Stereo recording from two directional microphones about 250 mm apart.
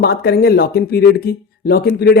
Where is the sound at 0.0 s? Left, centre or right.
Left.